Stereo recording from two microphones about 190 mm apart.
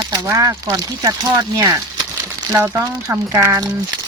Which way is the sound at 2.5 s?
15° right (ahead or behind).